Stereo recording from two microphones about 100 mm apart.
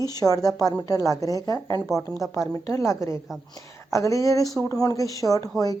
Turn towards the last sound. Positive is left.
turn(degrees=35)  # may be behind; listen again after turning